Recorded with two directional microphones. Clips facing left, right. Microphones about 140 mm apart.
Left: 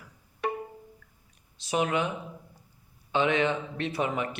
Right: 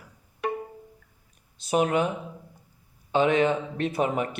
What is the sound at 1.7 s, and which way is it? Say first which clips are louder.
Speech: right 4 dB; 45° right (ahead or behind).